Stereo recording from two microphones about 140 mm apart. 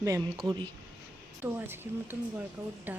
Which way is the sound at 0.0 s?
20° right (ahead or behind).